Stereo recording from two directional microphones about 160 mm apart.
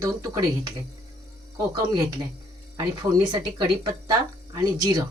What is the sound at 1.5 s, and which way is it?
Speech, 20° right (ahead or behind).